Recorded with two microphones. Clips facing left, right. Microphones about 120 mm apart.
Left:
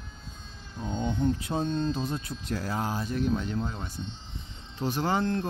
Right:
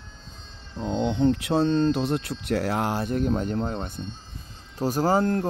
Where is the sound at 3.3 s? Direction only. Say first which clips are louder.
Right 4 dB; 40° right (ahead or behind).